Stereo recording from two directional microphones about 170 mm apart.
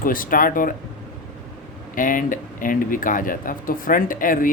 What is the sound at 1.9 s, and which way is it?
Speech, 55° left (ahead or behind).